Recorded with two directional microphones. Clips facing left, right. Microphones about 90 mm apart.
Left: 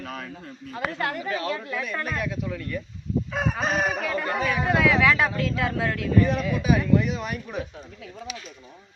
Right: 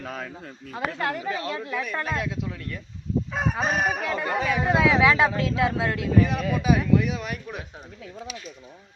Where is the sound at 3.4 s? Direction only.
10° right (ahead or behind).